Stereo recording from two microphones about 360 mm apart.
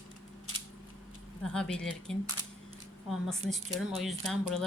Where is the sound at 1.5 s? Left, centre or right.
Centre.